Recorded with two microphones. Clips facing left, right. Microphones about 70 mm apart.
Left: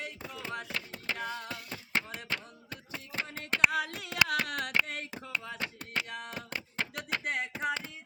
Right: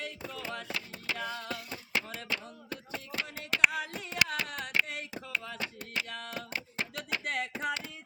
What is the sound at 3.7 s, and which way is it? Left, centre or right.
Hands, left.